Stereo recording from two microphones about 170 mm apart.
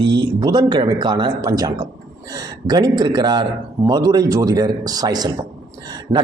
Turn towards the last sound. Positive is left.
turn(degrees=-35)  # may be behind; listen again after turning